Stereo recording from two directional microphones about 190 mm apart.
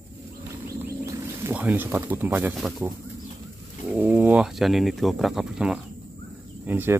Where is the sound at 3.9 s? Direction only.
10° right (ahead or behind).